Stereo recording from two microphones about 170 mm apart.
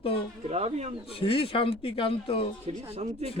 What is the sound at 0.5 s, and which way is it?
Speech, 40° right (ahead or behind).